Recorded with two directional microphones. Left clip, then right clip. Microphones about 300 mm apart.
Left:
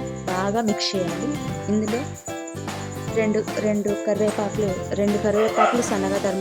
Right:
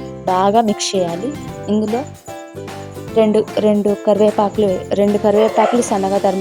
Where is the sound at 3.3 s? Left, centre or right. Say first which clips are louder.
Right 8 dB; right.